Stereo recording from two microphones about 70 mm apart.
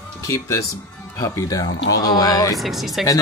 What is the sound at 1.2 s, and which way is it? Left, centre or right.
Music, left.